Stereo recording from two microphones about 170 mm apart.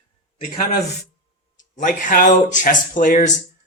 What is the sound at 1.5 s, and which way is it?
A man's voice, 50° left (ahead or behind).